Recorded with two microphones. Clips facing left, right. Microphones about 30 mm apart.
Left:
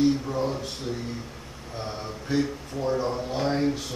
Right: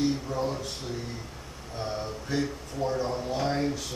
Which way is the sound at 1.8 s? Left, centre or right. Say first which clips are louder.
Right 1 dB; centre.